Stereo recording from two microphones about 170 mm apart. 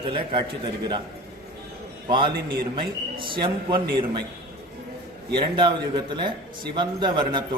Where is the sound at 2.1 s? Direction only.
30° right (ahead or behind).